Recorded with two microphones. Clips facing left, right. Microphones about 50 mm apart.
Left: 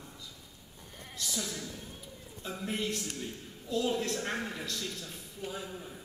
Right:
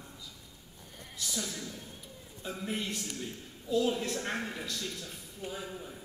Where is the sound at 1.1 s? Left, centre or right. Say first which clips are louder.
Even; centre.